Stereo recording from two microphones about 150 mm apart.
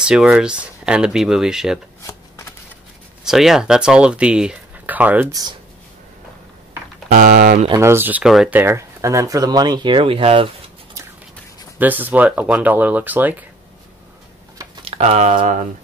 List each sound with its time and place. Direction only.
0.0 s speech: 5° right (ahead or behind)
3.3 s speech: 5° right (ahead or behind)
5.3 s speech: 25° right (ahead or behind)
7.1 s speech: 80° right
7.8 s speech: 15° right (ahead or behind)
8.5 s speech: 20° right (ahead or behind); by 10.5 s 40° right (ahead or behind)
11.0 s a sound: 20° right (ahead or behind)
11.8 s speech: 10° right (ahead or behind)
14.9 s speech: 40° right (ahead or behind); by 15.6 s 60° right (ahead or behind)